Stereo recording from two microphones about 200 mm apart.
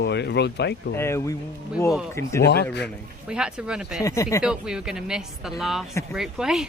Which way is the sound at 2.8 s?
5° right (ahead or behind).